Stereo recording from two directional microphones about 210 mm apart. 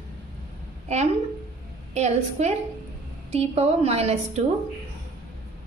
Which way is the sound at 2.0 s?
30° right (ahead or behind).